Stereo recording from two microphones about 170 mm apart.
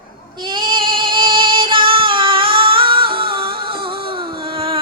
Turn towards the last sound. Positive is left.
turn(degrees=-30)  # may be behind; listen again after turning